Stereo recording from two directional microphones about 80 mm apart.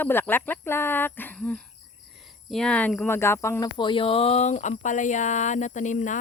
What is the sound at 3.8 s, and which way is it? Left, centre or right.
Speech, left.